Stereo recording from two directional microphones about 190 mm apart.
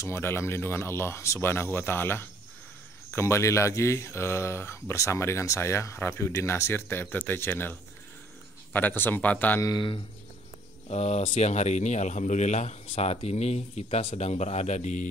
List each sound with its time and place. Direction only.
0.0 s speech: 15° left (ahead or behind)
8.7 s speech: 10° left (ahead or behind)
10.9 s speech: 35° left (ahead or behind)